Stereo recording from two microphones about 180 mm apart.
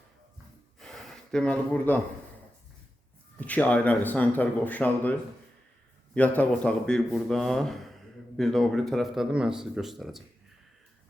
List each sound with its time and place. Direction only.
0.8 s gasp: centre (ahead or behind)
3.3 s speech: 10° left (ahead or behind)
6.1 s speech: 10° left (ahead or behind)